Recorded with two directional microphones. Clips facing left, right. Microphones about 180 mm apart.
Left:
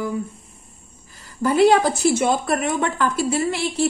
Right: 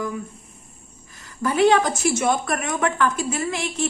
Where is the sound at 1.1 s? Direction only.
35° left (ahead or behind).